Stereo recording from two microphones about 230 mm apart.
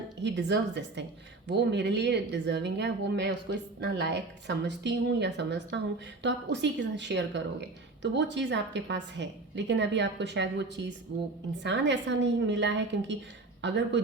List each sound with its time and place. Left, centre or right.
0.2 s speech: right